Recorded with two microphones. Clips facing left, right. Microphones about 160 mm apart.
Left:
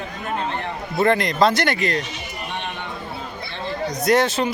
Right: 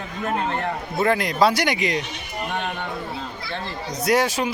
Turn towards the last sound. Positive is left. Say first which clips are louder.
# left 2 dB
turn(degrees=-10)  # may be behind; listen again after turning